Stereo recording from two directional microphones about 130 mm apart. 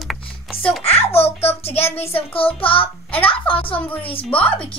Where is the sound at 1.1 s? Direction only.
50° left (ahead or behind).